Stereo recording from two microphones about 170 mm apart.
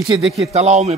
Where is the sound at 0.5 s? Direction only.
40° right (ahead or behind).